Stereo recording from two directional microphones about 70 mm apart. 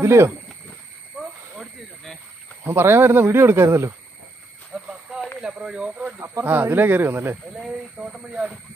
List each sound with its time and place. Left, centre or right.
0.0 s speech: right
2.6 s speech: right
4.7 s a sound: centre
5.4 s speech: centre
6.4 s speech: right
8.2 s speech: centre